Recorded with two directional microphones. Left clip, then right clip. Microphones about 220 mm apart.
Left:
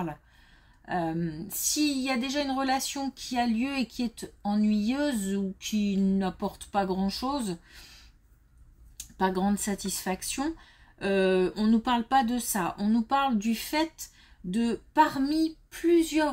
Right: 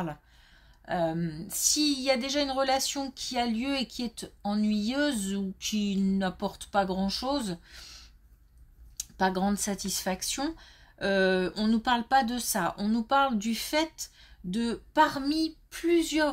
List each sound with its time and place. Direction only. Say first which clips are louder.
0.8 s a woman's voice: right 1 dB; 30° right (ahead or behind)
9.1 s a woman's voice: even; 30° right (ahead or behind)